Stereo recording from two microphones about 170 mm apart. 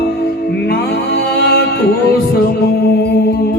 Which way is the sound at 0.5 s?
70° left (ahead or behind).